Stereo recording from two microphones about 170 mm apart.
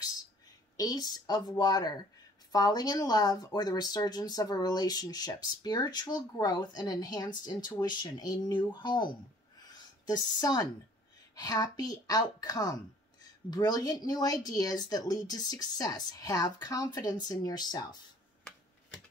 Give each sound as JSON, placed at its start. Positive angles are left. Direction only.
{"t": 0.7, "sound": "speech", "side_deg": 20}
{"t": 9.7, "sound": "a sound", "side_deg": 25}
{"t": 11.3, "sound": "speech", "side_deg": 20}